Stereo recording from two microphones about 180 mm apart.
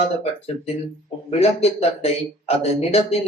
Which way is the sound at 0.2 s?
35° left (ahead or behind).